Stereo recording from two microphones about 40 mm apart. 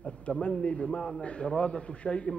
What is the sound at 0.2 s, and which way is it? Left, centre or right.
A man's voice, left.